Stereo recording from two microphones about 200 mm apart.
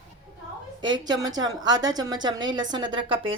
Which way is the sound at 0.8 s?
20° right (ahead or behind).